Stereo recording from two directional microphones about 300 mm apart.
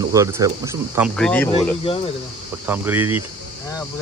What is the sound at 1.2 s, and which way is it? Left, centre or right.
Speech, centre.